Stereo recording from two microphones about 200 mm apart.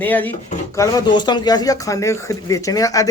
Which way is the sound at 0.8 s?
20° left (ahead or behind).